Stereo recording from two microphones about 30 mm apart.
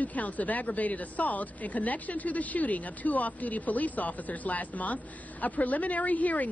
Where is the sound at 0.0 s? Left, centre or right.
Left.